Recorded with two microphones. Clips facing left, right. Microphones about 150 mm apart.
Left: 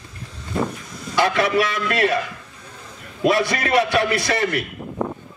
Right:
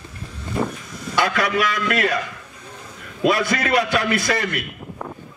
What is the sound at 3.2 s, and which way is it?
A man's voice, 25° left (ahead or behind).